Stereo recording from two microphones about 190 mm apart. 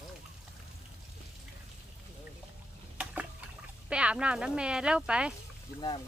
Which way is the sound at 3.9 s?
5° right (ahead or behind).